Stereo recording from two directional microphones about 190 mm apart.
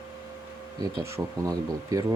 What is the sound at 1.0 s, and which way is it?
Speech, 15° right (ahead or behind).